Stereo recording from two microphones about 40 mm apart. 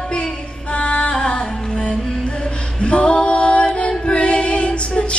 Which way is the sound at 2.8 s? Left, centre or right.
Left.